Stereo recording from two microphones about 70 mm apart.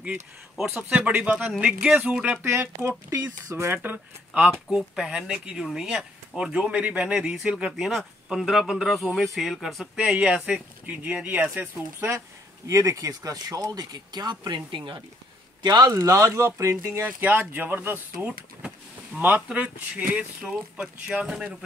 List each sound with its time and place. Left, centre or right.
0.8 s speech: centre
2.4 s speech: right
4.6 s a man's voice: centre
9.9 s speech: centre
12.6 s speech: right
15.6 s speech: right
15.9 s speech: right
17.0 s speech: right